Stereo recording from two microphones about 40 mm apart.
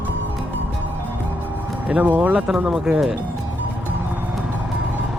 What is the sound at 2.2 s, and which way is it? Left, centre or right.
Speech, centre.